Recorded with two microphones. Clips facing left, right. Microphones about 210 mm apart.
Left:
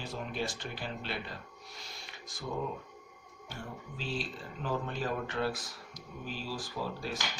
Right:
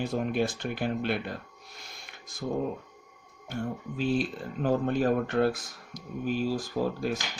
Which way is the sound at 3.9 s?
55° right (ahead or behind).